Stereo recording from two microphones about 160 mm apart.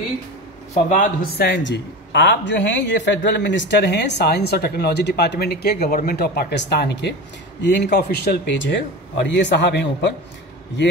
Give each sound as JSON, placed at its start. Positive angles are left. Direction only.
{"t": 0.8, "sound": "a man's voice", "side_deg": 55}
{"t": 1.3, "sound": "speech", "side_deg": 90}